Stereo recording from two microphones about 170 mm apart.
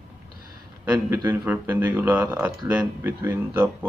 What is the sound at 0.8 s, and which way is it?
Speech, 10° right (ahead or behind).